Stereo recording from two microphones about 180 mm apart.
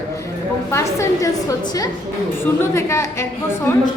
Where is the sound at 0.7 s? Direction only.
15° left (ahead or behind).